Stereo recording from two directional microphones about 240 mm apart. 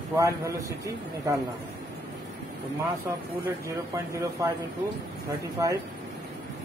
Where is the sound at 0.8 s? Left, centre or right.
Centre.